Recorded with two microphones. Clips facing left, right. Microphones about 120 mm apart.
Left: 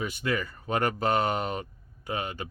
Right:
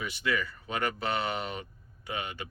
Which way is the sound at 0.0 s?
45° left (ahead or behind).